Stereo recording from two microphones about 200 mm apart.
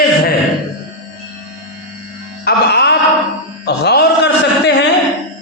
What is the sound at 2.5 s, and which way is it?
Music, 55° left (ahead or behind).